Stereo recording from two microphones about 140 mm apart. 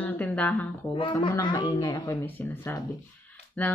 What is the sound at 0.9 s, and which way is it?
Child singing, 40° left (ahead or behind).